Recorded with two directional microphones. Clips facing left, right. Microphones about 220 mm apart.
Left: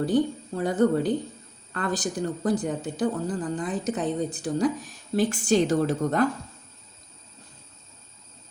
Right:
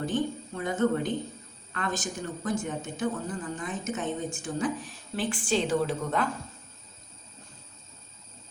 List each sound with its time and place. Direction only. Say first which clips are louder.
0.0 s speech: left 6 dB; 35° left (ahead or behind)